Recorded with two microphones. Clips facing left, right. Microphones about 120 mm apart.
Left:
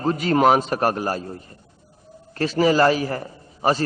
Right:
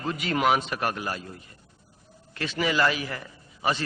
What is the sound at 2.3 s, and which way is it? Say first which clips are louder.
A man's voice: left 8 dB; 40° left (ahead or behind).